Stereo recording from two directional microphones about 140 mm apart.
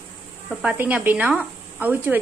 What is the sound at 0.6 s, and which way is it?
Speech, 10° right (ahead or behind).